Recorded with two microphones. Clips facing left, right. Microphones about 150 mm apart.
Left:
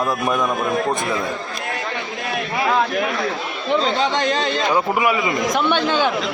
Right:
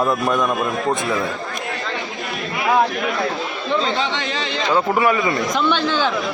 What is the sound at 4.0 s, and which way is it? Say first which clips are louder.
Speech: left 4 dB; 45° left (ahead or behind).